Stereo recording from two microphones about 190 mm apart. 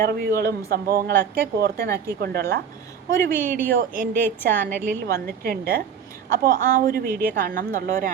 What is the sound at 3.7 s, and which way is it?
Speech, 45° right (ahead or behind).